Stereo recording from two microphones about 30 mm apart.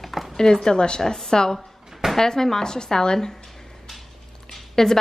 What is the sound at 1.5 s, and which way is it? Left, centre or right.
Drawer open or close, centre.